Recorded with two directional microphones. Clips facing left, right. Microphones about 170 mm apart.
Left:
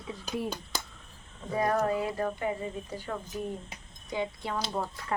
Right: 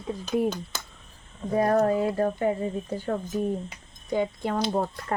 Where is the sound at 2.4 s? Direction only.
45° right (ahead or behind).